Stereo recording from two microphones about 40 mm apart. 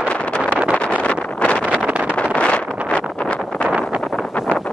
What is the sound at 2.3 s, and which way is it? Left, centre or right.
Wind noise, left.